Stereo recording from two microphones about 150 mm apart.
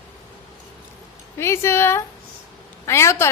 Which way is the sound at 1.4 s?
15° left (ahead or behind).